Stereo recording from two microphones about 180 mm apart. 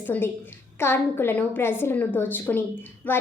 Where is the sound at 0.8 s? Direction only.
10° left (ahead or behind).